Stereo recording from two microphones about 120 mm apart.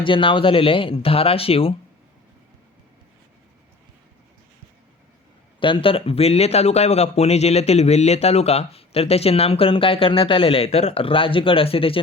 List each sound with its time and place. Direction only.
0.0 s speech: 45° left (ahead or behind)
5.5 s speech: 45° left (ahead or behind)